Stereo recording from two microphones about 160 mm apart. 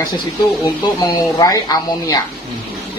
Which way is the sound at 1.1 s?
25° left (ahead or behind).